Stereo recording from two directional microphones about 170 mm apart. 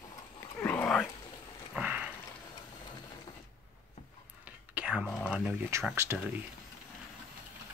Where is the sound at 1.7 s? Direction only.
5° right (ahead or behind).